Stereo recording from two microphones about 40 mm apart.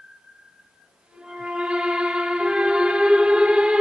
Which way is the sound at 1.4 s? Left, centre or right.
Right.